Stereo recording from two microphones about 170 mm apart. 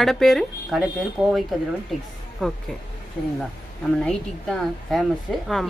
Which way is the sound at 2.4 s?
5° left (ahead or behind).